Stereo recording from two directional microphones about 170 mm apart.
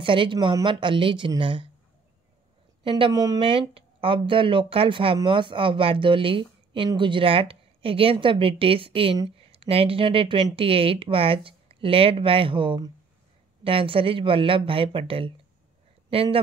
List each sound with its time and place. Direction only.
0.0 s speech: 30° right (ahead or behind)
2.8 s speech: 30° right (ahead or behind)